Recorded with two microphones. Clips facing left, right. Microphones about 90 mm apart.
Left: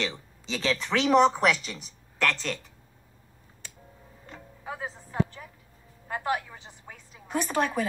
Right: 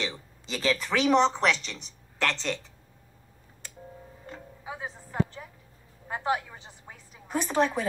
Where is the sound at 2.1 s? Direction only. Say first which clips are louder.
Left 1 dB; 25° right (ahead or behind).